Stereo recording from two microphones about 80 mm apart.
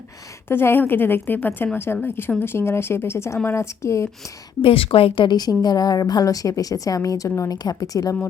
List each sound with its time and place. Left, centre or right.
0.4 s a woman's voice: left
4.6 s speech: left
5.4 s a woman's voice: left